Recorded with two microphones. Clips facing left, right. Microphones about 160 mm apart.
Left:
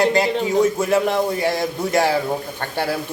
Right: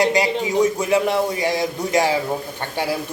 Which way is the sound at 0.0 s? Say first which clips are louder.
Left 1 dB; 15° right (ahead or behind).